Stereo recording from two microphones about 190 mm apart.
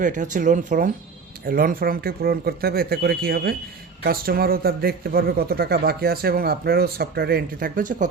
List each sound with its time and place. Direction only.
0.0 s a man's voice: 40° right (ahead or behind)